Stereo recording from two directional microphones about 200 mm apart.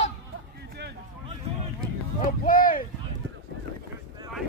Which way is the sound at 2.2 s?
45° left (ahead or behind).